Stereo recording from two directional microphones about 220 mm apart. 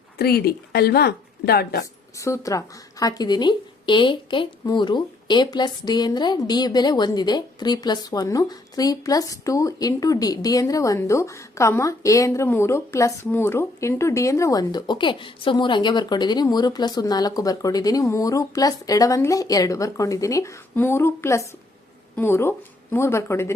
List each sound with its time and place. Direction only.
0.2 s a woman's voice: 45° left (ahead or behind)
2.1 s speech: 15° left (ahead or behind)